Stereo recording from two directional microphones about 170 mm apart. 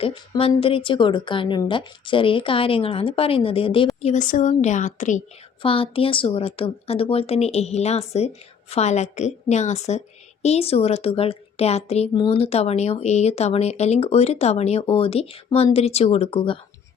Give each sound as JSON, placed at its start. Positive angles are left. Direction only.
{"t": 0.0, "sound": "a woman's voice", "side_deg": 35}
{"t": 4.0, "sound": "a woman's voice", "side_deg": 45}
{"t": 5.6, "sound": "a woman's voice", "side_deg": 35}